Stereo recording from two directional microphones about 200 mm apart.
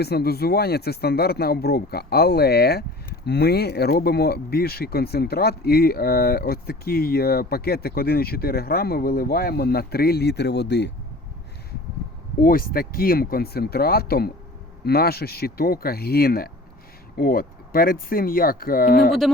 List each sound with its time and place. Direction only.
0.0 s speech: 55° left (ahead or behind)
12.4 s speech: 45° left (ahead or behind)